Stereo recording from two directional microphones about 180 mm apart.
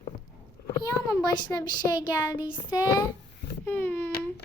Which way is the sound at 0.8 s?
20° left (ahead or behind).